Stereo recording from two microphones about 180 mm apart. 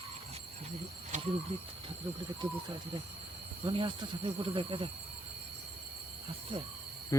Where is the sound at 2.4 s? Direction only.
25° right (ahead or behind).